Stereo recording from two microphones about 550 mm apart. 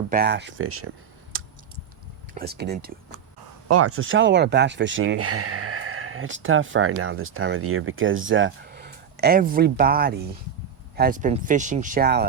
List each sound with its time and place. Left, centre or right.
0.1 s speech: centre
1.3 s a sound: right
2.3 s speech: centre